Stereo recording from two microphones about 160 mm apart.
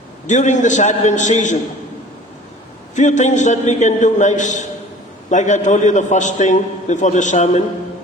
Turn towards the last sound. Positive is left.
turn(degrees=50)  # may be behind; listen again after turning